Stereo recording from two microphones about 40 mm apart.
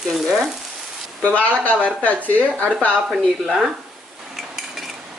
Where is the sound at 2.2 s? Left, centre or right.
Right.